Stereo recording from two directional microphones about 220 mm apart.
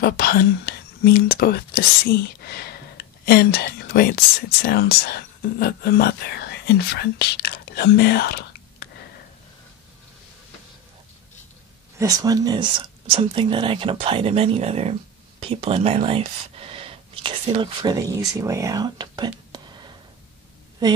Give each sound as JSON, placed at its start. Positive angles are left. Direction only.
{"t": 0.0, "sound": "speech", "side_deg": 45}
{"t": 12.0, "sound": "speech", "side_deg": -15}
{"t": 19.5, "sound": "a sound", "side_deg": -20}